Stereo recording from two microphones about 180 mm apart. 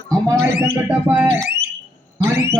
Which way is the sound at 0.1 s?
15° right (ahead or behind).